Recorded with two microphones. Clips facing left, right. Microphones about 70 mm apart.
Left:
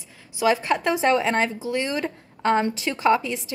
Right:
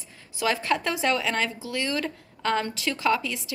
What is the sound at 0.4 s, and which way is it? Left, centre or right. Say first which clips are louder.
Speech: left 4 dB; left.